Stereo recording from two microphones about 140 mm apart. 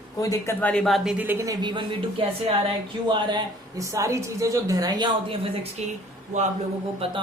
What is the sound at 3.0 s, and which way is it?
Speech, 35° right (ahead or behind).